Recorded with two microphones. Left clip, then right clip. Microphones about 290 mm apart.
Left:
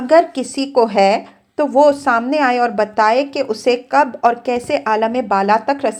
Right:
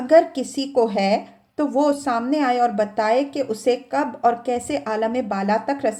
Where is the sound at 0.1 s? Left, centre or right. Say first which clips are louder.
Left 3 dB; centre.